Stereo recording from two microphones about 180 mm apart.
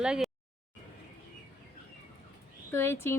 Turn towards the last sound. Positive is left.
turn(degrees=15)  # may be behind; listen again after turning